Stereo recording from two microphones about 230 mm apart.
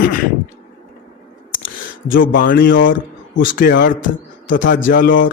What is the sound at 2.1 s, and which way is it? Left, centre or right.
A man's voice, left.